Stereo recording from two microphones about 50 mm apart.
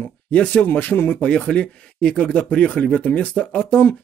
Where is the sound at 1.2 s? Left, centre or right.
Left.